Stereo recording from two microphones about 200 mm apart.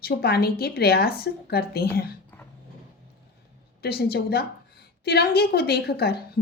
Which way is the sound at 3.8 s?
50° left (ahead or behind).